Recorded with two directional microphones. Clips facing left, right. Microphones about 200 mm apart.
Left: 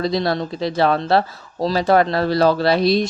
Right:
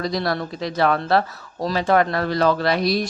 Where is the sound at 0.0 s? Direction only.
25° left (ahead or behind).